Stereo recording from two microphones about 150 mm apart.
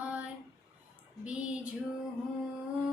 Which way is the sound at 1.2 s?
10° right (ahead or behind).